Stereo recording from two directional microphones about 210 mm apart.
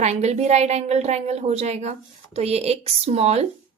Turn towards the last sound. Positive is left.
turn(degrees=-30)  # may be behind; listen again after turning